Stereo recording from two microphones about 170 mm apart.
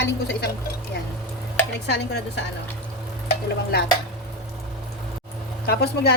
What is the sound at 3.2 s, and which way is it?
Stir, 65° left (ahead or behind).